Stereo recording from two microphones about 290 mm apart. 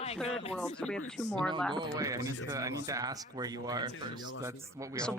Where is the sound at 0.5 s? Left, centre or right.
Centre.